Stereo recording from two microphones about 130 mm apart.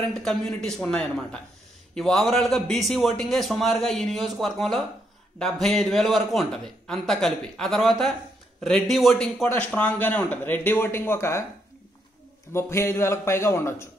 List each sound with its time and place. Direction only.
0.2 s a man's voice: 5° left (ahead or behind); by 11.4 s 20° left (ahead or behind)
12.5 s a man's voice: 20° left (ahead or behind)